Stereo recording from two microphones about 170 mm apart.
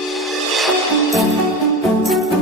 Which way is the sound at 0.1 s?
Centre (ahead or behind).